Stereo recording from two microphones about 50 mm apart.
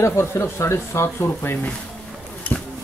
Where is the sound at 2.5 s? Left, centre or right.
Left.